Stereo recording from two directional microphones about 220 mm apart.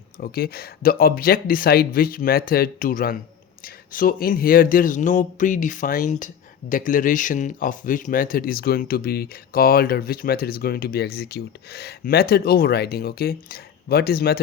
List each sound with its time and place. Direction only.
0.2 s speech: 45° left (ahead or behind)